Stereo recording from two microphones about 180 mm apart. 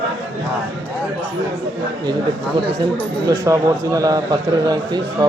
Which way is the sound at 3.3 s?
20° right (ahead or behind).